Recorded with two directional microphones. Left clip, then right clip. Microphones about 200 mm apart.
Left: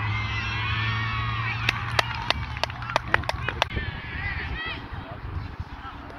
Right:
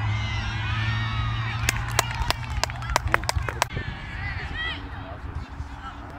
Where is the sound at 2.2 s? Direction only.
30° left (ahead or behind).